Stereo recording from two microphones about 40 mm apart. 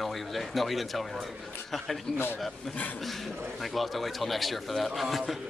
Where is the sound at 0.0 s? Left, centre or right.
Centre.